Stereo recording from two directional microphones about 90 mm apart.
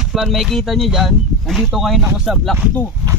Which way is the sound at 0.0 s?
5° right (ahead or behind).